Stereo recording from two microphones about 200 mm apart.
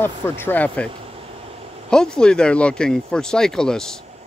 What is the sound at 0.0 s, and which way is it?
Speech, 10° left (ahead or behind).